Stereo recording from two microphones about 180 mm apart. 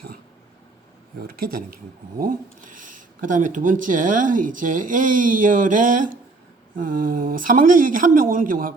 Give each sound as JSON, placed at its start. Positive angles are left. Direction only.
{"t": 1.4, "sound": "speech", "side_deg": -55}